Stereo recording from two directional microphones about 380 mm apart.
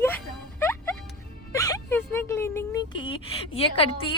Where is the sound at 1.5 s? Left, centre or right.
Centre.